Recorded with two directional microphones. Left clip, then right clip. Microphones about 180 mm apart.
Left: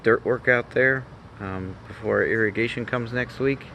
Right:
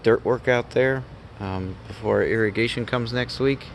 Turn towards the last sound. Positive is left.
turn(degrees=-20)  # may be behind; listen again after turning